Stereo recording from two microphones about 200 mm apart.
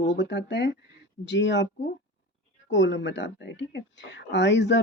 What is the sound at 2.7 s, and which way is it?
Speech, 65° left (ahead or behind).